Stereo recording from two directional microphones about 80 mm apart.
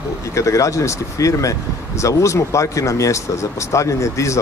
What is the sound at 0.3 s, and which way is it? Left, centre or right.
Speech, left.